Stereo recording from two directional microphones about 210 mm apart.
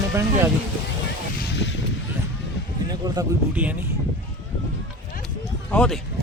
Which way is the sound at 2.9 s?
20° right (ahead or behind).